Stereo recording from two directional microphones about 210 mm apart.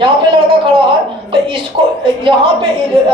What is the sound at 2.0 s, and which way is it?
Speech, 25° right (ahead or behind).